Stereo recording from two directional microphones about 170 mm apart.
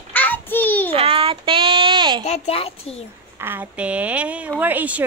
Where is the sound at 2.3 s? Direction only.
35° left (ahead or behind).